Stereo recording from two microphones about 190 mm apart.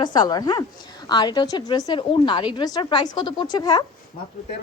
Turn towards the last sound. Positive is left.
turn(degrees=20)  # may be behind; listen again after turning